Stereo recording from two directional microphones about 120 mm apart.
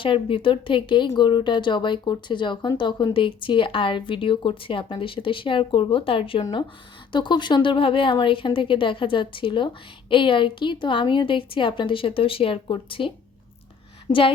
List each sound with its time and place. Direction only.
0.0 s speech: 45° left (ahead or behind)